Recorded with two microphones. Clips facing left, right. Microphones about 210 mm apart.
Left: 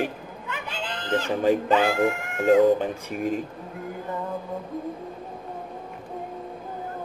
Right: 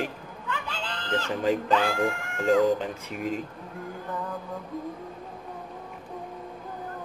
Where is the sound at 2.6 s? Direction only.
50° left (ahead or behind).